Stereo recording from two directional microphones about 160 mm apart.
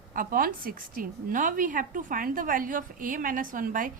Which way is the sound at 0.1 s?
60° right (ahead or behind).